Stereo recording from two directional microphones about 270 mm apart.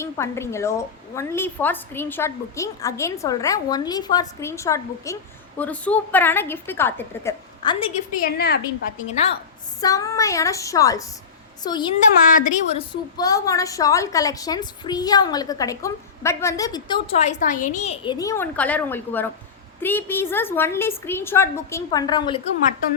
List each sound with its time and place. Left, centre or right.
0.0 s a woman's voice: centre
8.2 s a woman's voice: left
9.0 s a woman's voice: left
9.8 s a woman's voice: centre
12.3 s a woman's voice: left
12.9 s a woman's voice: centre